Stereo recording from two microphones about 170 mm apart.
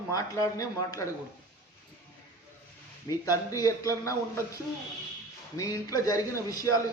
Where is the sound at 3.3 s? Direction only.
20° left (ahead or behind).